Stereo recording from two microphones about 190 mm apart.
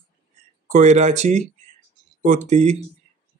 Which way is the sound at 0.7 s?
40° right (ahead or behind).